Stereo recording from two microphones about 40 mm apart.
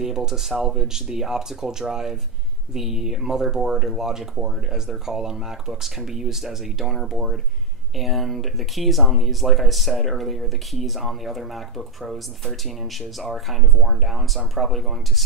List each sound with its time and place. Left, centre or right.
0.0 s speech: centre